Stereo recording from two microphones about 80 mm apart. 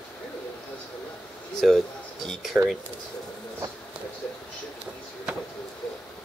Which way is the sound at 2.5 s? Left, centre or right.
Centre.